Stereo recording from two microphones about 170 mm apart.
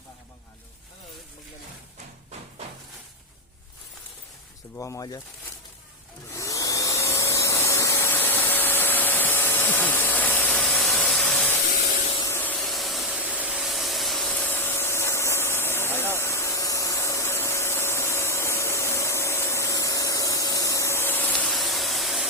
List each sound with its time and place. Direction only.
4.8 s speech: 20° left (ahead or behind)
6.3 s vacuum cleaner: 20° left (ahead or behind)
11.8 s spray: 40° left (ahead or behind)
12.2 s a sound: 10° left (ahead or behind)